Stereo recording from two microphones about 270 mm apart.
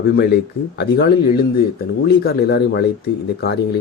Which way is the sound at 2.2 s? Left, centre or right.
Left.